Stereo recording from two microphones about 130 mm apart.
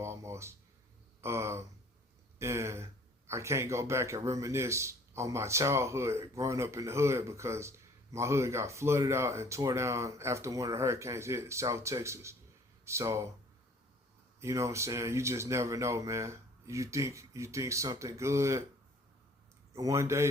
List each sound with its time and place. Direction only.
0.0 s a sound: 20° right (ahead or behind)
1.2 s a man's voice: 20° right (ahead or behind)
14.3 s a man's voice: 20° right (ahead or behind)
19.7 s a man's voice: 25° right (ahead or behind)